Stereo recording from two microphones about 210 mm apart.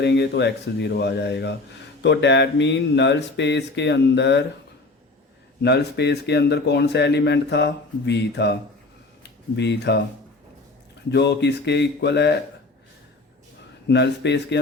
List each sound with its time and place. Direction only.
0.0 s speech: 55° left (ahead or behind)
5.6 s speech: 55° left (ahead or behind)
11.1 s speech: 55° left (ahead or behind)
13.8 s speech: 55° left (ahead or behind)